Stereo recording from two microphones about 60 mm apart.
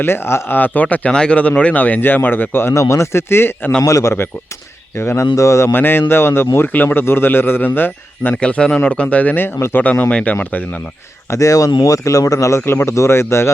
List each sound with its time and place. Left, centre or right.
0.0 s a man's voice: left
2.7 s speech: left
3.8 s speech: left
4.9 s speech: left
5.7 s a man's voice: left
8.4 s speech: centre
11.3 s speech: left